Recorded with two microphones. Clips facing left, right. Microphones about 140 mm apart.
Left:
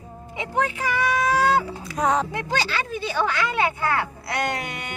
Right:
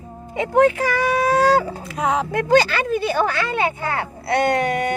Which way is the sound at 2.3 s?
50° right (ahead or behind).